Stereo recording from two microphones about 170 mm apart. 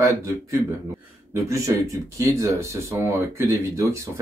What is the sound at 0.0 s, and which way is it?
Speech, 15° right (ahead or behind).